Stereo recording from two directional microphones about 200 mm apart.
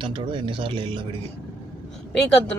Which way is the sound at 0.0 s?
25° right (ahead or behind).